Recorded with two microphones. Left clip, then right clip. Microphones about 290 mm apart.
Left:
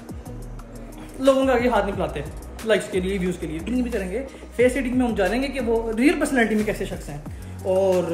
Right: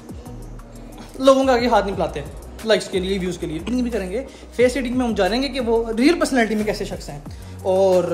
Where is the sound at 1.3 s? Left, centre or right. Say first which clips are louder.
Right 3 dB; centre.